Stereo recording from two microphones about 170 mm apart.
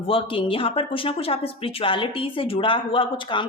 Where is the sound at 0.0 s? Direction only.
30° left (ahead or behind).